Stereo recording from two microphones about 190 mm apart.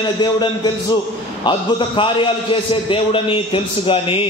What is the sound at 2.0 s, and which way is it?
A man's voice, 25° left (ahead or behind).